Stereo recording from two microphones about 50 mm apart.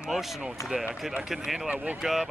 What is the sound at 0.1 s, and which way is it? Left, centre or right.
Speech, centre.